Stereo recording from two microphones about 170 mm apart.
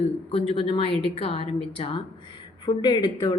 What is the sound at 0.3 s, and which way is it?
A woman's voice, 30° left (ahead or behind).